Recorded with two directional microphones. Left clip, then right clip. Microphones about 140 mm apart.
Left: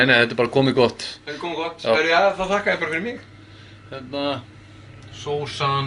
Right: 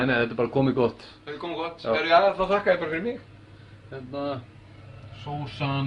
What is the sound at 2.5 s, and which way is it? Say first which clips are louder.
Speech: left 2 dB; 50° right (ahead or behind).